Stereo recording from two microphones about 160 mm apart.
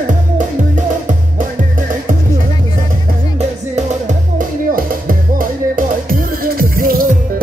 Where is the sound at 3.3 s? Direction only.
45° right (ahead or behind).